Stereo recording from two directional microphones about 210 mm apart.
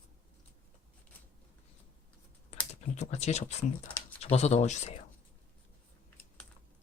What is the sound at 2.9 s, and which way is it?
Speech, 35° left (ahead or behind).